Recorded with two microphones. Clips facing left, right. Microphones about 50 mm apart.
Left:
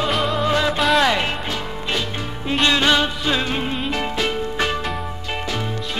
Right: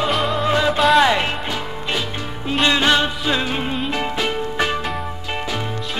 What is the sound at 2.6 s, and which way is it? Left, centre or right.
Music, centre.